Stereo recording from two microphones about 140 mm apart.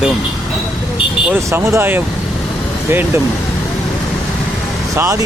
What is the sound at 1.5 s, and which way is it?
Speech, 20° right (ahead or behind).